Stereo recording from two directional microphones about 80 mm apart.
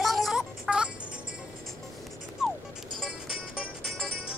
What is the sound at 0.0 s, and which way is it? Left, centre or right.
Music, centre.